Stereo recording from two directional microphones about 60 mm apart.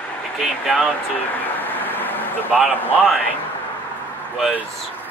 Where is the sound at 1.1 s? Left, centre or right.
Left.